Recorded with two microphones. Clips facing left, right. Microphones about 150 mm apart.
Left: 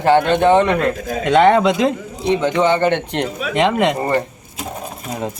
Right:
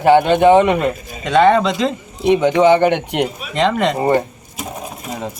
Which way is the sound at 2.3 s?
15° right (ahead or behind).